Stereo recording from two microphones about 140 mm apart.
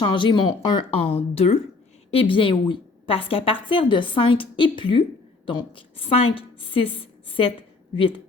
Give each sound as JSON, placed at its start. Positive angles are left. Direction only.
{"t": 0.0, "sound": "a woman's voice", "side_deg": 35}